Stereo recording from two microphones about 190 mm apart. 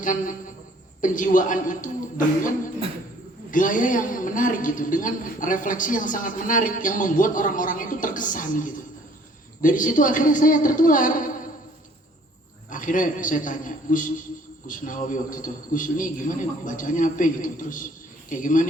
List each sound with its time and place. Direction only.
0.0 s a woman's voice: 45° left (ahead or behind)
3.5 s a woman's voice: 45° left (ahead or behind)
12.7 s a woman's voice: 45° left (ahead or behind)